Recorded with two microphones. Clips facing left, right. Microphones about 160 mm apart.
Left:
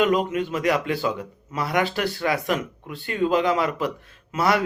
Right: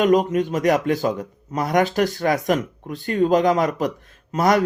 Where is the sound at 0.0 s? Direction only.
45° right (ahead or behind).